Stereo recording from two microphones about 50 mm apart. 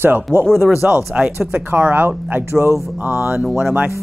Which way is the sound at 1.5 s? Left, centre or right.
Right.